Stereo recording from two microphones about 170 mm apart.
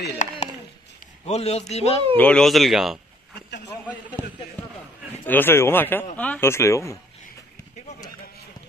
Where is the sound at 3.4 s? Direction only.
85° left.